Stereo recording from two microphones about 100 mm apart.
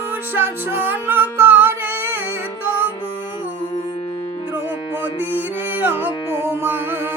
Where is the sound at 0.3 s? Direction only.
20° right (ahead or behind).